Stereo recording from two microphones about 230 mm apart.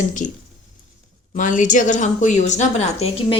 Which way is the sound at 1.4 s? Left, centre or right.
Left.